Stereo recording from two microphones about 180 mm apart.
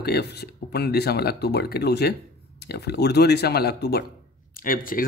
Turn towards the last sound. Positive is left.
turn(degrees=50)  # may be behind; listen again after turning